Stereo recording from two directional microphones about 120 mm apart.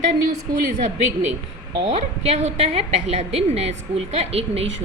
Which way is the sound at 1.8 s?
55° right (ahead or behind).